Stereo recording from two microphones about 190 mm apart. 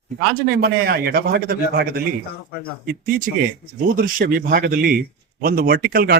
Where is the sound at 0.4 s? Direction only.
55° right (ahead or behind).